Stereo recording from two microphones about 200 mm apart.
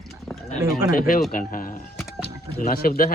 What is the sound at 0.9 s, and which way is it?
Speech, 45° left (ahead or behind).